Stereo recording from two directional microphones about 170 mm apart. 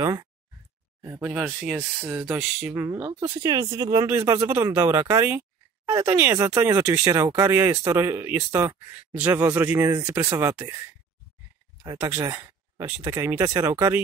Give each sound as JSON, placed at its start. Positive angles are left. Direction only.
{"t": 0.0, "sound": "speech", "side_deg": -20}
{"t": 3.3, "sound": "speech", "side_deg": -25}
{"t": 11.8, "sound": "speech", "side_deg": -20}